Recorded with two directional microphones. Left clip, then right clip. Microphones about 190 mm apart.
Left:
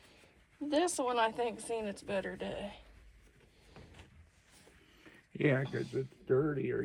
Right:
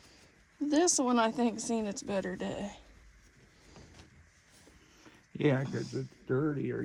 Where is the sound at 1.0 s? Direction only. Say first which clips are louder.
Right 2 dB; 30° right (ahead or behind).